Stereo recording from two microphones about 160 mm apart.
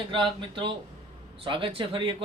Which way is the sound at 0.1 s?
30° right (ahead or behind).